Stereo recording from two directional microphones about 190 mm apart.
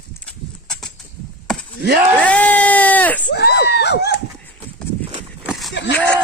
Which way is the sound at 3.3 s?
60° left (ahead or behind).